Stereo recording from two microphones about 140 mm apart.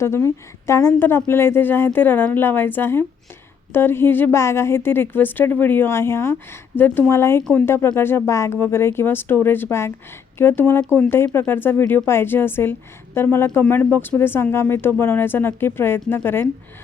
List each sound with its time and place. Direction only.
0.0 s a woman's voice: 20° left (ahead or behind)